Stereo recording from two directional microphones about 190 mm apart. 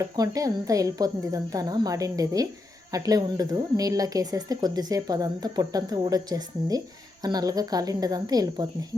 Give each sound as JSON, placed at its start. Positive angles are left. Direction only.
{"t": 0.0, "sound": "speech", "side_deg": -20}